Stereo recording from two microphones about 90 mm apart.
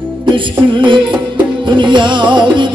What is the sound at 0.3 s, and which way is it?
Music, 65° right (ahead or behind).